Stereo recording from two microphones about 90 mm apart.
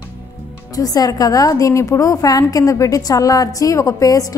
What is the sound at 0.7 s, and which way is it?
A woman's voice, 45° left (ahead or behind).